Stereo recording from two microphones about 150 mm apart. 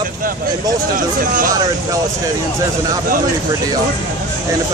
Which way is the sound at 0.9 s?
65° right (ahead or behind).